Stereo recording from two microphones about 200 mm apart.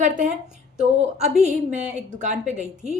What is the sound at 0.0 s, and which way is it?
A woman's voice, 40° right (ahead or behind).